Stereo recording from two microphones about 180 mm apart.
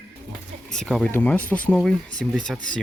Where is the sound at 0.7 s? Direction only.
5° left (ahead or behind).